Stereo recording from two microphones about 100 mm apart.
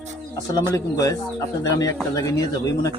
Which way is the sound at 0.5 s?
35° left (ahead or behind).